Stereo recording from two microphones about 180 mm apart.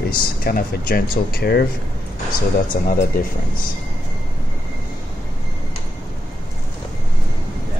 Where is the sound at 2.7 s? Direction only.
50° left (ahead or behind).